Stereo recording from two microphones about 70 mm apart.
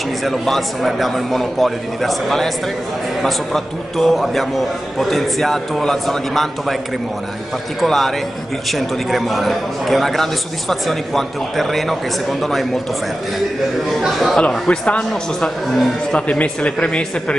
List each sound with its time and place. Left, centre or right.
0.2 s a man's voice: centre
7.8 s a man's voice: centre
14.0 s a man's voice: centre
14.4 s speech: centre
15.7 s a man's voice: centre
16.2 s speech: centre